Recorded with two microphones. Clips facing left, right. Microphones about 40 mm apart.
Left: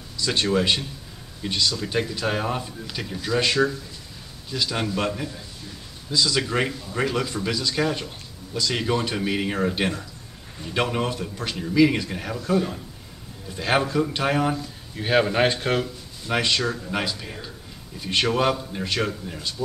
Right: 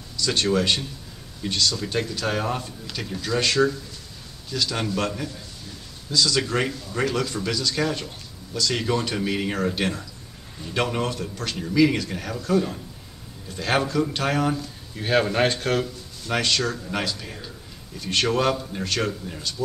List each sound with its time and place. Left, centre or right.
0.2 s a man's voice: centre